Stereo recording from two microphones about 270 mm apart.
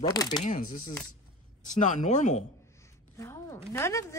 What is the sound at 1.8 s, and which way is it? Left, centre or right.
Speech, left.